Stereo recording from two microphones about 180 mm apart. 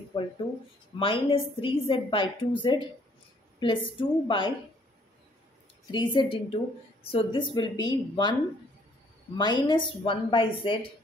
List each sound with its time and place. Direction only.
0.1 s a woman's voice: 25° left (ahead or behind)
5.9 s a woman's voice: 25° left (ahead or behind)
9.4 s a woman's voice: 25° left (ahead or behind)